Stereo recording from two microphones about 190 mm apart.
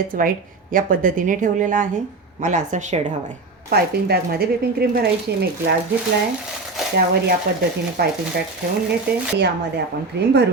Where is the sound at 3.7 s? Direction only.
55° right (ahead or behind).